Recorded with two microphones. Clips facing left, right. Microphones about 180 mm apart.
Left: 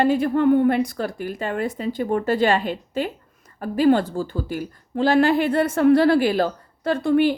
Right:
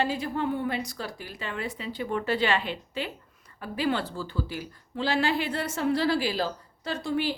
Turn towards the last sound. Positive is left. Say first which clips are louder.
# left 10 dB
turn(degrees=55)  # may be behind; listen again after turning